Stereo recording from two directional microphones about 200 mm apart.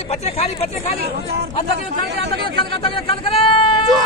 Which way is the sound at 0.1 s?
30° left (ahead or behind).